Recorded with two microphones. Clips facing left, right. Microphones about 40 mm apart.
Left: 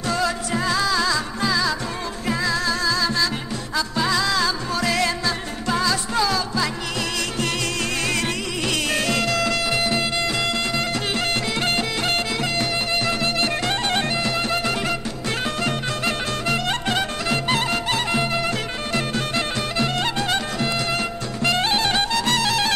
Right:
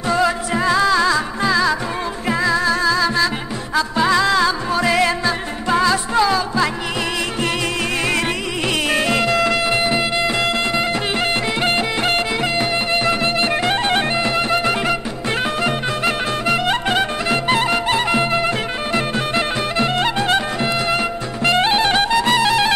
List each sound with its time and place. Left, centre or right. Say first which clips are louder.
0.1 s music: right 6 dB; centre
8.9 s music: right 6 dB; centre
16.4 s music: right 5 dB; right